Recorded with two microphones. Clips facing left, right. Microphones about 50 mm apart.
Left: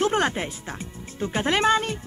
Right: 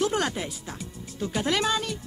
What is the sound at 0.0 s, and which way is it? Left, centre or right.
Music, left.